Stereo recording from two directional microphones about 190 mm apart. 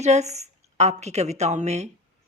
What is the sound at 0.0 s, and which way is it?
A woman's voice, 35° right (ahead or behind).